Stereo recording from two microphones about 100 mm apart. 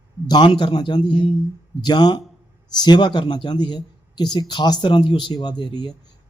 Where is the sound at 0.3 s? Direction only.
50° left (ahead or behind).